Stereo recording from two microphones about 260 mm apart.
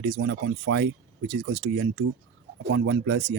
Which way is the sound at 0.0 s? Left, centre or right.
Right.